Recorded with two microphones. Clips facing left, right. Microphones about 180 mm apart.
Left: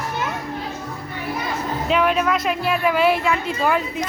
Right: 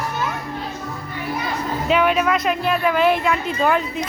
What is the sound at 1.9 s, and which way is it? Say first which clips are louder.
Speech: right 1 dB; centre (ahead or behind).